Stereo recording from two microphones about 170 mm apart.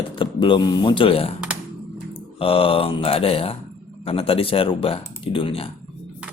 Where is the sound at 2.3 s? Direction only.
35° left (ahead or behind).